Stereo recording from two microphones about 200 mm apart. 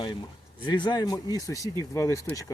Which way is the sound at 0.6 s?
20° left (ahead or behind).